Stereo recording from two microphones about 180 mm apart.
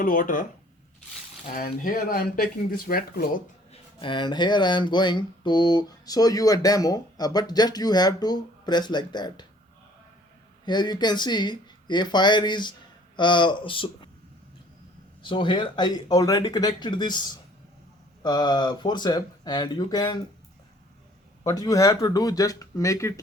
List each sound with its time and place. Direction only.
0.0 s speech: 50° left (ahead or behind)
1.5 s speech: 50° left (ahead or behind)
3.7 s speech: 25° left (ahead or behind)
10.7 s speech: 25° left (ahead or behind)
15.2 s speech: 30° left (ahead or behind)
21.4 s speech: 20° left (ahead or behind)